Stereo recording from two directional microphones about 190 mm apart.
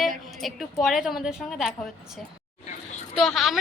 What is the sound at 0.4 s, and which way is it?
A woman's voice, centre (ahead or behind).